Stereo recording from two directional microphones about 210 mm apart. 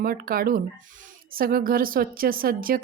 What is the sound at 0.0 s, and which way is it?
Speech, 45° right (ahead or behind).